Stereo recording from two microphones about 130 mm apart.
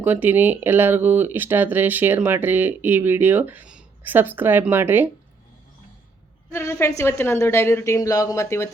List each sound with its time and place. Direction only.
0.0 s speech: 15° right (ahead or behind)
6.5 s a woman's voice: 20° left (ahead or behind)